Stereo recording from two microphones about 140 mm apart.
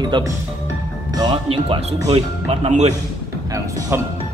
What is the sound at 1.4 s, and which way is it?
Speech, 40° right (ahead or behind).